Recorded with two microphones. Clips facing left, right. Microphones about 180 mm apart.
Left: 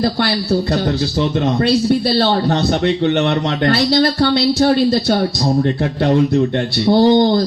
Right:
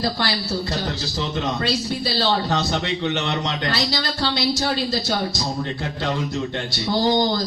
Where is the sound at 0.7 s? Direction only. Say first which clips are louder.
Left 9 dB; 60° left (ahead or behind).